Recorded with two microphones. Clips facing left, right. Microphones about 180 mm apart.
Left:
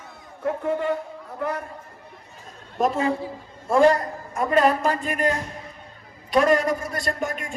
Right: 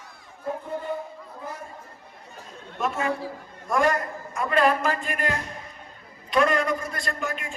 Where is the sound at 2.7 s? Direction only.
35° left (ahead or behind).